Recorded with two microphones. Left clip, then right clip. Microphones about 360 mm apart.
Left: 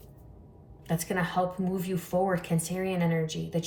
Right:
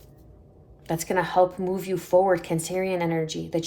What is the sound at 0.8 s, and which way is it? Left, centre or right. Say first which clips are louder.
Speech: right 6 dB; right.